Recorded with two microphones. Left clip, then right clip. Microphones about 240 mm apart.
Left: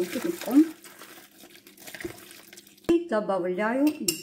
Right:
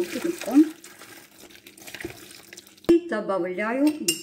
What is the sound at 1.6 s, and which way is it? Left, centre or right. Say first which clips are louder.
Water: right 1 dB; centre.